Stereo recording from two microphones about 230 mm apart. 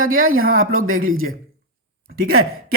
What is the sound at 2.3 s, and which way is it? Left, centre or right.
Speech, right.